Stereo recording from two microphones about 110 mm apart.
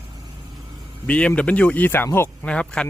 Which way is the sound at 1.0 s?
10° left (ahead or behind).